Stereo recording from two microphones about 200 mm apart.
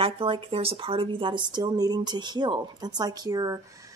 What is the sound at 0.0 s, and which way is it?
Speech, 25° right (ahead or behind).